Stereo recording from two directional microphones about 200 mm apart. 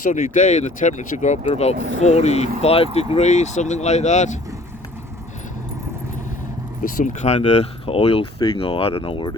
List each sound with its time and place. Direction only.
0.0 s speech: 40° left (ahead or behind)
6.8 s speech: 40° left (ahead or behind); by 9.3 s 25° left (ahead or behind)